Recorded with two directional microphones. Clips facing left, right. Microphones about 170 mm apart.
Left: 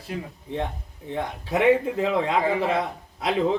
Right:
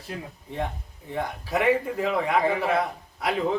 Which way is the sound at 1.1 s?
25° left (ahead or behind).